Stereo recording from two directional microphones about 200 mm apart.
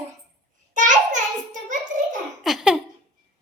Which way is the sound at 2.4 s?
Centre (ahead or behind).